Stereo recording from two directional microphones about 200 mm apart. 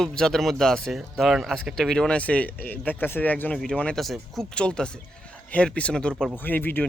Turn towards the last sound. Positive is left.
turn(degrees=10)  # may be behind; listen again after turning